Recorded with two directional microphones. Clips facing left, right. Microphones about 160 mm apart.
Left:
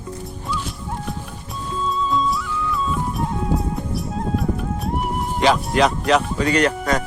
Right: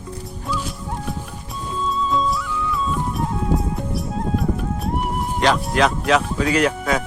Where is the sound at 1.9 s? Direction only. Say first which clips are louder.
Even; centre (ahead or behind).